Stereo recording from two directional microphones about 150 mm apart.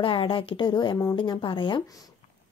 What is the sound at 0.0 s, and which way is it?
Speech, 35° left (ahead or behind).